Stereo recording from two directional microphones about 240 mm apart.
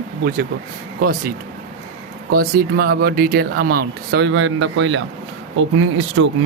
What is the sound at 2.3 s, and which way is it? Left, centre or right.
Speech, right.